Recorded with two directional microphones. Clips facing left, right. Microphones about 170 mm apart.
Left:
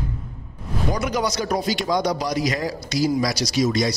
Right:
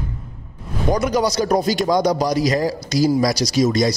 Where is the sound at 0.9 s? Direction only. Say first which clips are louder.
Right 6 dB; 40° right (ahead or behind).